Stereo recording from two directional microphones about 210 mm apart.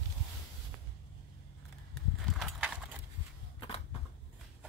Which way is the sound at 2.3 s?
Centre (ahead or behind).